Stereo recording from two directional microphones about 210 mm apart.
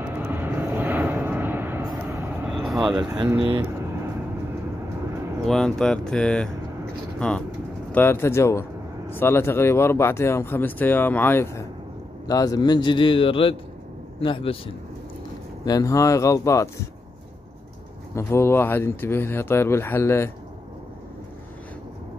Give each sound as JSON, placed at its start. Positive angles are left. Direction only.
{"t": 0.0, "sound": "vehicle", "side_deg": -10}
{"t": 3.0, "sound": "speech", "side_deg": -20}
{"t": 3.3, "sound": "speech", "side_deg": -10}
{"t": 5.5, "sound": "a man's voice", "side_deg": 5}
{"t": 18.1, "sound": "speech", "side_deg": 10}